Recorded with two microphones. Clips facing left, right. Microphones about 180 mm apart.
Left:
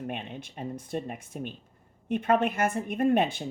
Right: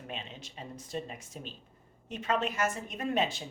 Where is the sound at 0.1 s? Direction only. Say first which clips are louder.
Left 6 dB; 60° left (ahead or behind).